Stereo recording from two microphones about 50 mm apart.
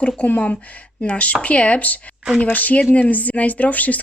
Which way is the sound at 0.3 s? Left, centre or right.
Left.